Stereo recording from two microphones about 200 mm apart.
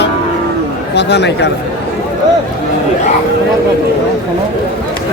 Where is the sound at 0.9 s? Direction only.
60° left (ahead or behind).